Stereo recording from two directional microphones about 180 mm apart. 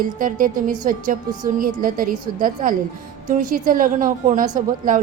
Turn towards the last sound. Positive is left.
turn(degrees=-45)  # may be behind; listen again after turning